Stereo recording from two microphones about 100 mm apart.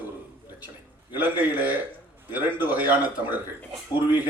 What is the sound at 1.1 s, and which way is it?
Speech, 20° right (ahead or behind).